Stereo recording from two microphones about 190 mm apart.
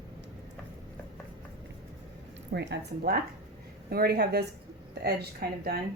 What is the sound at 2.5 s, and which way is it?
Speech, 65° right (ahead or behind).